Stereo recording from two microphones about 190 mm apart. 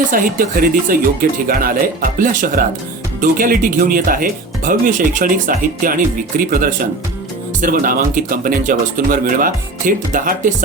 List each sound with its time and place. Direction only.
0.1 s speech: 45° right (ahead or behind)